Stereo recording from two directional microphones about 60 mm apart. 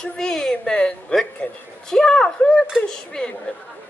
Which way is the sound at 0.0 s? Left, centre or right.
Centre.